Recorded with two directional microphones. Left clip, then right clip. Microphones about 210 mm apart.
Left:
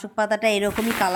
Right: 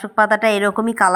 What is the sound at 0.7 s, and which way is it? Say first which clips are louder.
Speech: right 6 dB; 15° right (ahead or behind).